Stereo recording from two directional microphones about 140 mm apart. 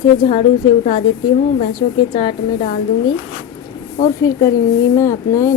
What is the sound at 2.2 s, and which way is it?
Speech, 40° left (ahead or behind).